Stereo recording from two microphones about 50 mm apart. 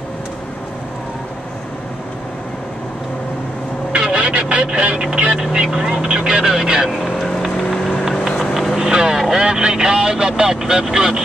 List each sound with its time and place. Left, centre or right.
3.9 s vehicle: right
5.1 s speech: right
5.4 s speech: centre
6.9 s vehicle: centre
8.9 s speech: centre